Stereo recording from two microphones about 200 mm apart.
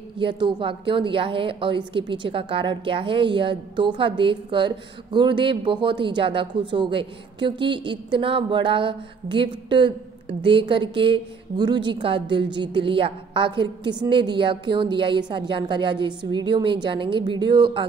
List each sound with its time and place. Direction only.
0.2 s speech: 25° right (ahead or behind)